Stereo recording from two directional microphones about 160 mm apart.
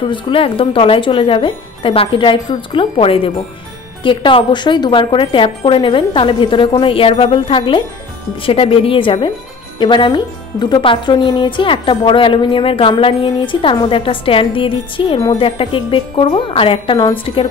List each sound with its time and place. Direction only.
0.0 s speech: 30° left (ahead or behind)